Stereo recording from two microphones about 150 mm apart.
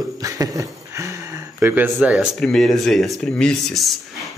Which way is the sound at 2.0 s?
5° right (ahead or behind).